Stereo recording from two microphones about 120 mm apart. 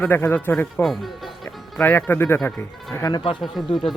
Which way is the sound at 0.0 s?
20° left (ahead or behind).